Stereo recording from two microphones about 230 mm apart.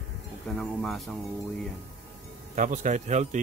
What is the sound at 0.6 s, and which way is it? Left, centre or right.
Speech, centre.